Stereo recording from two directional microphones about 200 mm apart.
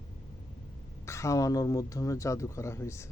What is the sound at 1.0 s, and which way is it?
Speech, 15° left (ahead or behind).